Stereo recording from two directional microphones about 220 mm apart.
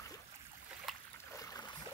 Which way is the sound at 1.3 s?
15° left (ahead or behind).